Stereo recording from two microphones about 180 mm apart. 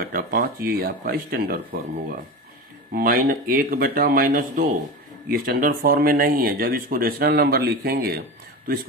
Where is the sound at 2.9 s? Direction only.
55° right (ahead or behind).